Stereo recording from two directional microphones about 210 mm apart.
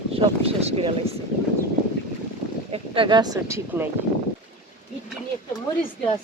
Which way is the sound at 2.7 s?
25° right (ahead or behind).